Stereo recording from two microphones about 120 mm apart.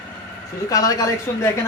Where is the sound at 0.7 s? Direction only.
30° left (ahead or behind).